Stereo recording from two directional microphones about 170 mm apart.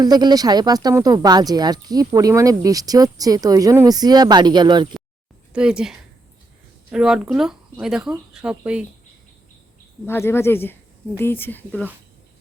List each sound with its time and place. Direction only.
0.0 s speech: 25° right (ahead or behind)
5.5 s speech: 5° right (ahead or behind)
10.1 s speech: 15° left (ahead or behind)